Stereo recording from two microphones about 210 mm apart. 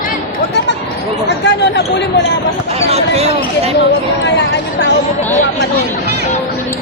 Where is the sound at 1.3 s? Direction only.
55° left (ahead or behind).